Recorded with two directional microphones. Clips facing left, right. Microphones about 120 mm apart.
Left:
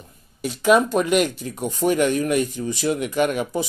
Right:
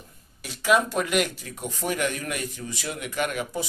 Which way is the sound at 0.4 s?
20° left (ahead or behind).